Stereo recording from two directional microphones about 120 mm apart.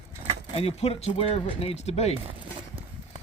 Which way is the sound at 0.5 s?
55° left (ahead or behind).